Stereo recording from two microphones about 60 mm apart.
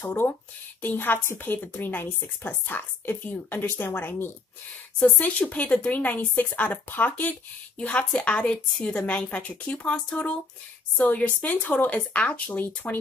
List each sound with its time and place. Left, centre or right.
0.0 s a woman's voice: left
4.9 s a woman's voice: centre
11.1 s a woman's voice: left